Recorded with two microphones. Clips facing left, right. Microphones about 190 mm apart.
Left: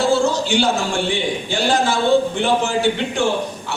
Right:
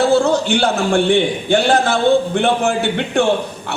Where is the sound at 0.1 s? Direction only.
60° right (ahead or behind).